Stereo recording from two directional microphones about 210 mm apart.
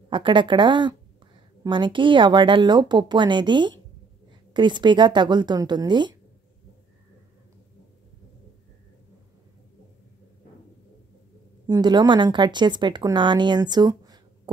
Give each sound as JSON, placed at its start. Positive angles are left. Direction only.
{"t": 0.1, "sound": "speech", "side_deg": -25}
{"t": 11.6, "sound": "speech", "side_deg": -20}